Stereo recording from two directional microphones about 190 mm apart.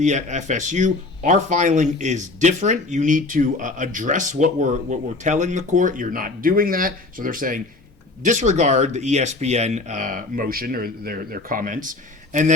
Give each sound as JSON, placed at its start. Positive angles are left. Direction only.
{"t": 0.0, "sound": "speech", "side_deg": -40}